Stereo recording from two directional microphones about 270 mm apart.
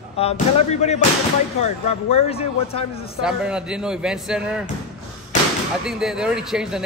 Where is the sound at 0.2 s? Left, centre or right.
Left.